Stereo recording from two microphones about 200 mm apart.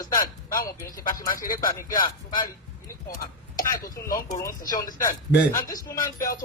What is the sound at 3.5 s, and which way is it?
Speech, 45° left (ahead or behind).